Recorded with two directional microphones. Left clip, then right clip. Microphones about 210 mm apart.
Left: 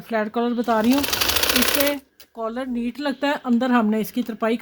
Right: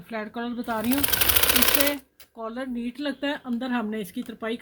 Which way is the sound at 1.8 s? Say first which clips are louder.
Left 4 dB; 45° left (ahead or behind).